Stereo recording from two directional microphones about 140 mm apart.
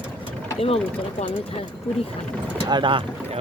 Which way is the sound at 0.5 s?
45° left (ahead or behind).